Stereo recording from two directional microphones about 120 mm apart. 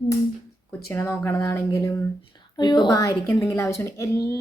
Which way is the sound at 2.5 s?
40° left (ahead or behind).